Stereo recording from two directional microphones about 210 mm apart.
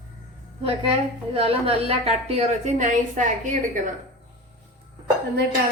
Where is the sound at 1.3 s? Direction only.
25° right (ahead or behind).